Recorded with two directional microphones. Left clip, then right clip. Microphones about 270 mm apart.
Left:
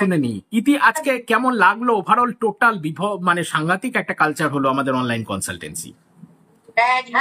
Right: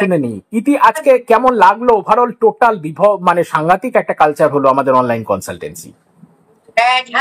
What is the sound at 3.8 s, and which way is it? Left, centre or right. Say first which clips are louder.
Speech: right 7 dB; centre.